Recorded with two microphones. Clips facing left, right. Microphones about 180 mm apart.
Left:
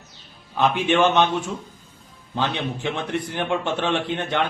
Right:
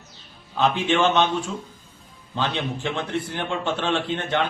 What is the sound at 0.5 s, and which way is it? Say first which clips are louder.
Speech: left 1 dB; 15° left (ahead or behind).